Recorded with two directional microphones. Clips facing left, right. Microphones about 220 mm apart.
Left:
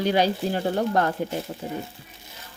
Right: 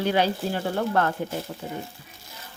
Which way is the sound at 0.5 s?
25° left (ahead or behind).